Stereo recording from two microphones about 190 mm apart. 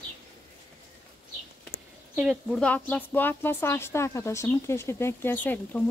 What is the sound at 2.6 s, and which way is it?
Speech, 5° left (ahead or behind).